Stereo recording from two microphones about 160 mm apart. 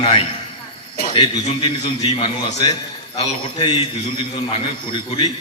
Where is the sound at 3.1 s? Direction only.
40° left (ahead or behind).